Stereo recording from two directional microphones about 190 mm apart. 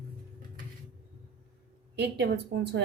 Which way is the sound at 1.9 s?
60° right (ahead or behind).